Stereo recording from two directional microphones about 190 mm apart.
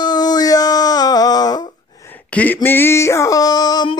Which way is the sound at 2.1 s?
10° left (ahead or behind).